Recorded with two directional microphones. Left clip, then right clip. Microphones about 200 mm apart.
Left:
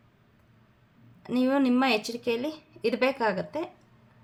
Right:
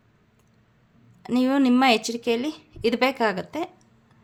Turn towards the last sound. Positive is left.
turn(degrees=-35)  # may be behind; listen again after turning